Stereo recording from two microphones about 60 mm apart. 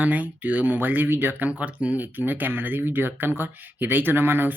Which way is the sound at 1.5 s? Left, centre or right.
Right.